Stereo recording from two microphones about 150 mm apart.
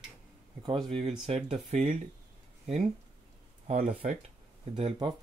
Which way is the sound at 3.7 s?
50° right (ahead or behind).